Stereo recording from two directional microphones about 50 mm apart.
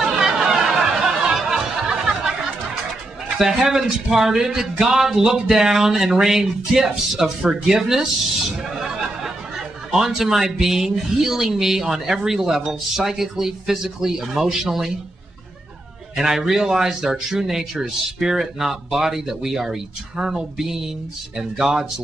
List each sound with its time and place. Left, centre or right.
0.0 s music: centre
3.3 s speech: centre
16.2 s speech: centre